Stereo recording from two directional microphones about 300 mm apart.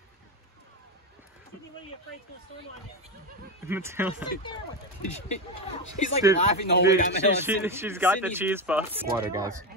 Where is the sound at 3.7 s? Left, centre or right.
Centre.